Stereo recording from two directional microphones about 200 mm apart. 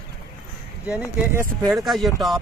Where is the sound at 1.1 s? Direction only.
10° right (ahead or behind).